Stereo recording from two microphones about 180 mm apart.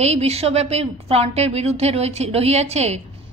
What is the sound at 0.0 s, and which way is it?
A woman's voice, 35° right (ahead or behind).